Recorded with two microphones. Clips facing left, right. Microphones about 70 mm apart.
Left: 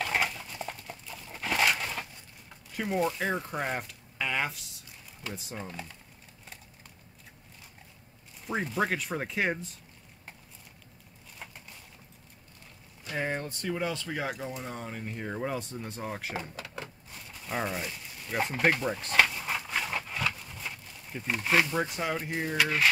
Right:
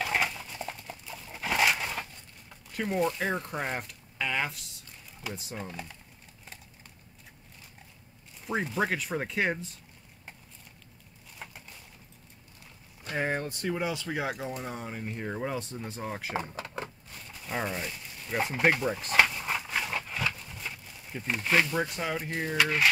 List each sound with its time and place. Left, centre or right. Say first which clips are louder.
0.0 s dog: even; centre
2.7 s speech: right 1 dB; centre
8.5 s speech: even; centre
11.4 s a sound: right 1 dB; centre
13.1 s speech: right 2 dB; centre
16.3 s drawer open or close: right 4 dB; right
17.3 s a sound: even; centre
22.4 s speech: right 1 dB; centre